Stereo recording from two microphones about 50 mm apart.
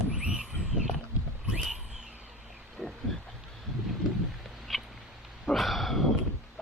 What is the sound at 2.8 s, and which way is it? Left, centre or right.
Frog, centre.